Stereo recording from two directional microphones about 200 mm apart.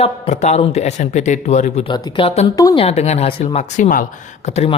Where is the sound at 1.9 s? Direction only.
20° left (ahead or behind).